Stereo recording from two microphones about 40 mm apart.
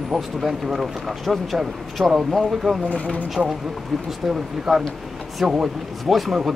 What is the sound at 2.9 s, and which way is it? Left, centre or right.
Speech, left.